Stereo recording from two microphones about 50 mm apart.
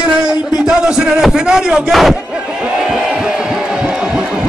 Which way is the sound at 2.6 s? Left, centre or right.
Centre.